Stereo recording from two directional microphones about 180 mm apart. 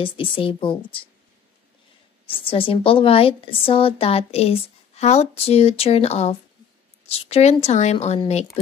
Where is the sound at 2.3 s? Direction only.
30° left (ahead or behind).